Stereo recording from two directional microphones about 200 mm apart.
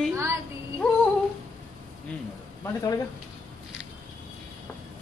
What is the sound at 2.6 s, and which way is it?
Speech, 20° left (ahead or behind).